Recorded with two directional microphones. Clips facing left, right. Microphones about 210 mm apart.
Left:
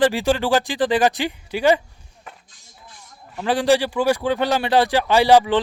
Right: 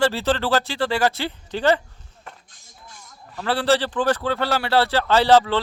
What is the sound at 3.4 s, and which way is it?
Speech, 15° left (ahead or behind).